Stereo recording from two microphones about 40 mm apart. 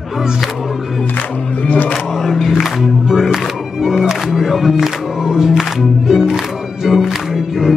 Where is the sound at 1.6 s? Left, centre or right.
Left.